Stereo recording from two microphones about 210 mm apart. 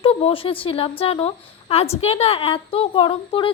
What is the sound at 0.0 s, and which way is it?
A woman's voice, 25° left (ahead or behind).